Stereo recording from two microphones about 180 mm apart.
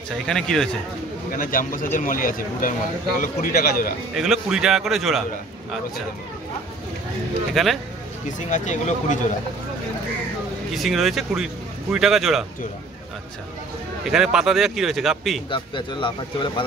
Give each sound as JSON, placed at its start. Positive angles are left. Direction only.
{"t": 0.3, "sound": "speech", "side_deg": 5}
{"t": 1.3, "sound": "speech", "side_deg": 50}
{"t": 4.1, "sound": "speech", "side_deg": 0}
{"t": 7.5, "sound": "speech", "side_deg": 0}
{"t": 8.5, "sound": "speech", "side_deg": 45}
{"t": 10.7, "sound": "speech", "side_deg": 0}
{"t": 14.0, "sound": "speech", "side_deg": -5}
{"t": 15.5, "sound": "speech", "side_deg": 25}